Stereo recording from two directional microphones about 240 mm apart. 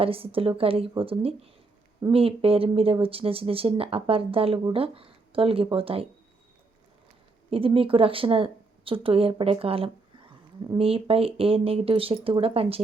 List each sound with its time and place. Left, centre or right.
0.0 s a woman's voice: right
7.5 s a woman's voice: right